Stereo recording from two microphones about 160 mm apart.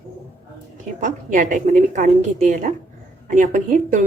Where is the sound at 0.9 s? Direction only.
50° right (ahead or behind).